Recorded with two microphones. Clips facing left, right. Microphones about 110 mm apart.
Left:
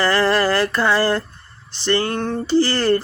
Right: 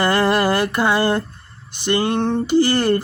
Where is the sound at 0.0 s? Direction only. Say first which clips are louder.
Even; 20° right (ahead or behind).